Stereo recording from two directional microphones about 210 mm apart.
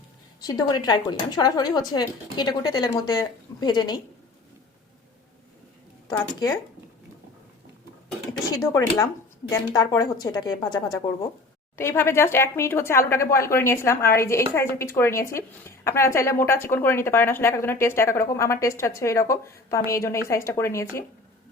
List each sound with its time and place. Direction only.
0.4 s speech: 20° left (ahead or behind)
6.1 s a woman's voice: 20° left (ahead or behind)
8.6 s a woman's voice: 15° left (ahead or behind)